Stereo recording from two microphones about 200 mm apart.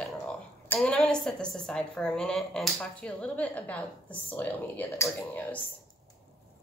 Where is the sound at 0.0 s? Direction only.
5° left (ahead or behind).